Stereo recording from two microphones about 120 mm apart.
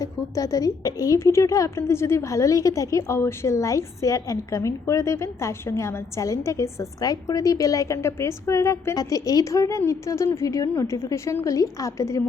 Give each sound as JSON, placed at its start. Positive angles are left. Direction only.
{"t": 0.0, "sound": "a woman's voice", "side_deg": 30}